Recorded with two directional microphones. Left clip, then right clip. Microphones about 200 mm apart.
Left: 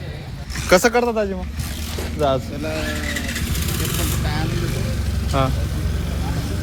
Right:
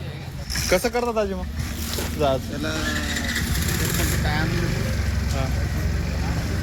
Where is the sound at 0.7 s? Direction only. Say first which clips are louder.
Left 7 dB; 50° left (ahead or behind).